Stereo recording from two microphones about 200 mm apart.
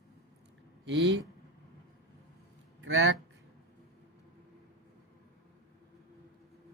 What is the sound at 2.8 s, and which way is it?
Speech, 65° right (ahead or behind).